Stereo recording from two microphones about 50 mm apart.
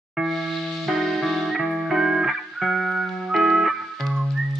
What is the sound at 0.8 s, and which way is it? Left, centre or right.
Music, centre.